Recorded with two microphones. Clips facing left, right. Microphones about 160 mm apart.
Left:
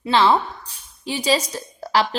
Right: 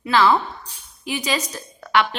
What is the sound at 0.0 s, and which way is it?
A woman's voice, 30° left (ahead or behind).